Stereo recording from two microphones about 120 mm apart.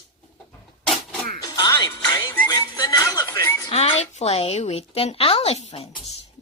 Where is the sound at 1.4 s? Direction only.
35° left (ahead or behind).